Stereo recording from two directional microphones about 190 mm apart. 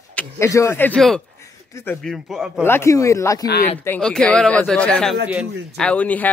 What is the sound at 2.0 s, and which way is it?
Speech, centre (ahead or behind).